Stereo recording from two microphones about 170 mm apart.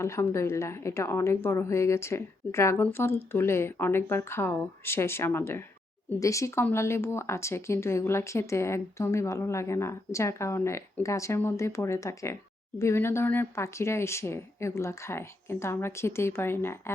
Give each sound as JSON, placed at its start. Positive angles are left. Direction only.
{"t": 0.0, "sound": "speech", "side_deg": 15}